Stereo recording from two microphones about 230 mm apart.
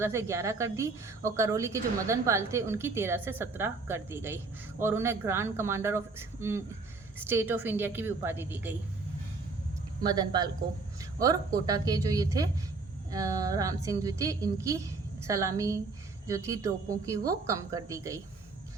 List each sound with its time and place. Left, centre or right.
0.0 s a woman's voice: centre
10.0 s a woman's voice: centre